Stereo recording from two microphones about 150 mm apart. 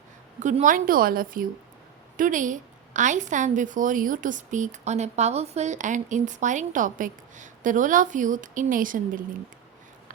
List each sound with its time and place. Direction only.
0.3 s a woman's voice: 55° right (ahead or behind)